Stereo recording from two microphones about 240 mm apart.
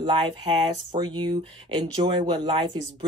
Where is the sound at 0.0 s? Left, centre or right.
Centre.